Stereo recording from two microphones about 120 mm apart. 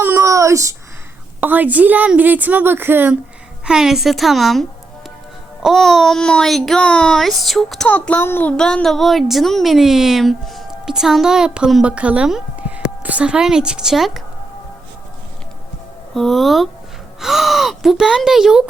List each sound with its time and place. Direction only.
0.0 s a sound: 25° right (ahead or behind)
1.4 s a woman's voice: 15° right (ahead or behind)
3.7 s a child's voice: 5° right (ahead or behind)
5.6 s a child's voice: centre (ahead or behind)
7.9 s a child's voice: 15° left (ahead or behind); by 14.2 s 5° right (ahead or behind)
16.1 s a child's voice: centre (ahead or behind)